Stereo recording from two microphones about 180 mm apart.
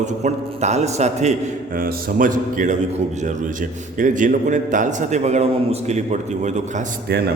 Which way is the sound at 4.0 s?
45° right (ahead or behind).